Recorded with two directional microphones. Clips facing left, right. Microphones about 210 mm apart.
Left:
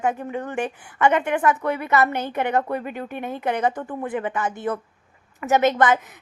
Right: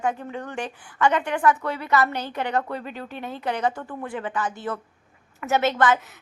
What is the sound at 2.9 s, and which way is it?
Speech, 55° left (ahead or behind).